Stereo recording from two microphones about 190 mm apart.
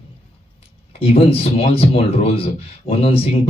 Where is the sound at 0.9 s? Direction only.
30° left (ahead or behind).